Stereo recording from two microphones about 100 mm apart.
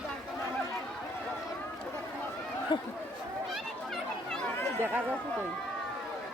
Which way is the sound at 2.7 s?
50° left (ahead or behind).